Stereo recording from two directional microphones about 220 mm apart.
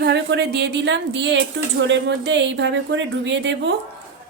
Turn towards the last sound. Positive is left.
turn(degrees=-55)  # may be behind; listen again after turning